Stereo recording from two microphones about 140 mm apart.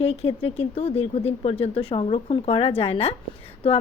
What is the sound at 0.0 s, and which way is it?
A woman's voice, 45° left (ahead or behind).